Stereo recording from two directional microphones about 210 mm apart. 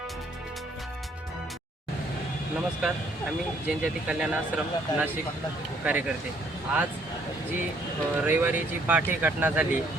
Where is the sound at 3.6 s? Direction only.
5° right (ahead or behind).